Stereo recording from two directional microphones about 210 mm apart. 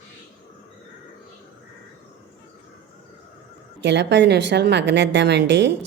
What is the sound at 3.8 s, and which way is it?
A woman's voice, 55° right (ahead or behind).